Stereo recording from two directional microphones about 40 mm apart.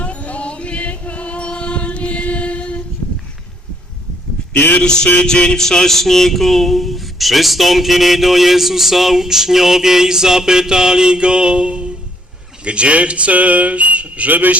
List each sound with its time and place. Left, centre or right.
0.0 s music: left
4.8 s music: left
5.6 s speech: centre; by 14.6 s right